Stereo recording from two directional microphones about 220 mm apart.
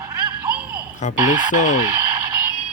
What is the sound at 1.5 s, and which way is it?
Speech, 35° left (ahead or behind).